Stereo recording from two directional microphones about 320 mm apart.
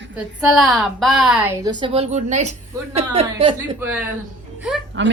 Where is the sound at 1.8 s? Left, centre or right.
Centre.